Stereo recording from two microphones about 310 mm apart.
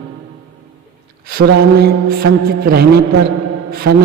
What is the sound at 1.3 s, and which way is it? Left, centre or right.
Music, right.